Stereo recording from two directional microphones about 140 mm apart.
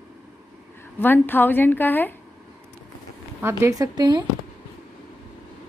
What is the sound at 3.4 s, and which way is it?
Speech, 25° right (ahead or behind).